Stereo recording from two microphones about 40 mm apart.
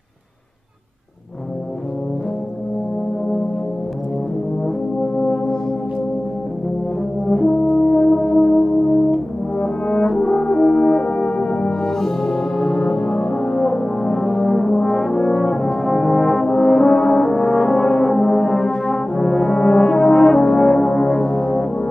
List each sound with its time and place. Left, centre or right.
5.0 s brass instrument: centre
7.2 s brass instrument: centre
9.6 s brass instrument: left
10.4 s french horn: left
11.8 s brass instrument: centre